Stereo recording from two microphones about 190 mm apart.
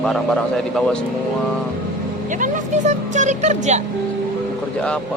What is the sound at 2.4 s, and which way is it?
Speech, 40° right (ahead or behind).